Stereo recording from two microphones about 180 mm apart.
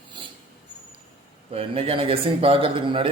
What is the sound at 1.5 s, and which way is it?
A man's voice, 30° right (ahead or behind).